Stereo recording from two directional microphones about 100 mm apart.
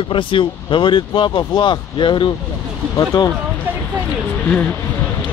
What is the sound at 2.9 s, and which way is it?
Speech, 40° left (ahead or behind).